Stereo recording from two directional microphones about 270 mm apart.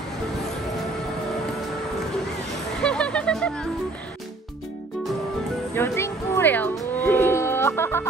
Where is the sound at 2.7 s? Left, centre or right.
Centre.